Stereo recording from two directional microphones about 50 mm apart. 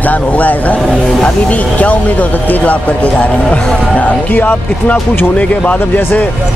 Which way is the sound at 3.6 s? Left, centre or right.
Centre.